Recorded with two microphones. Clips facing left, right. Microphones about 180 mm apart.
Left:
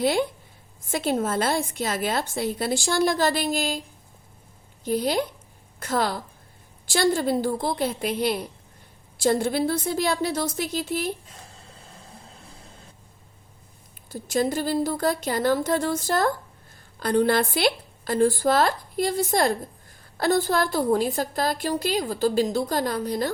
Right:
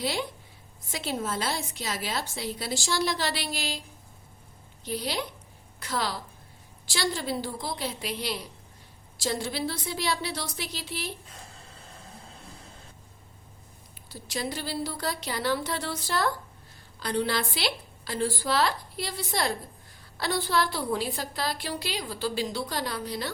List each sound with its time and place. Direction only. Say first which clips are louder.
0.0 s a woman's voice: left 8 dB; 50° left (ahead or behind)
4.9 s a woman's voice: left 8 dB; 45° left (ahead or behind)
14.1 s a woman's voice: left 9 dB; 50° left (ahead or behind)